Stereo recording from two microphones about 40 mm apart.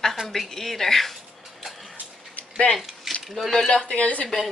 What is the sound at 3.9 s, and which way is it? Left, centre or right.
Speech, left.